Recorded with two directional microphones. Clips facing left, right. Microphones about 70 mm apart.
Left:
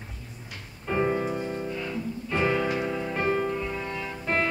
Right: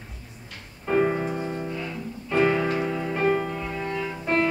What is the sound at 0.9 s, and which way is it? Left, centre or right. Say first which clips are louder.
Music: right 3 dB; centre.